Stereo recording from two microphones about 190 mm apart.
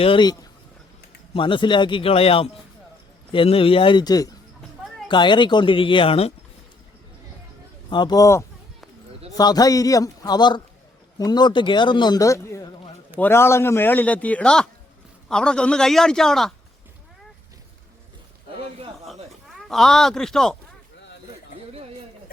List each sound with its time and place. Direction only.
0.0 s speech: 25° left (ahead or behind)
7.9 s a man's voice: 25° left (ahead or behind); by 16.5 s centre (ahead or behind)
19.0 s a sound: centre (ahead or behind)